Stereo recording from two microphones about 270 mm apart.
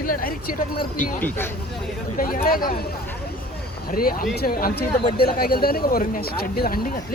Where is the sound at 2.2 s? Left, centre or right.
Left.